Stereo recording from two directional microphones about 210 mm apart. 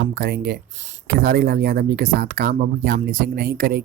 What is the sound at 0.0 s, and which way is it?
Speech, 50° right (ahead or behind).